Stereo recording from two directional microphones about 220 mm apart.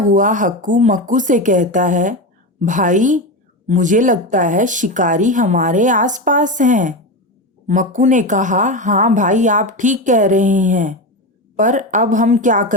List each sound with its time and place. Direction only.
0.0 s speech: 35° right (ahead or behind)